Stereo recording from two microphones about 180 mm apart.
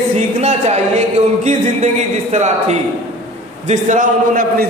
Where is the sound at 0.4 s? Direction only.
35° right (ahead or behind).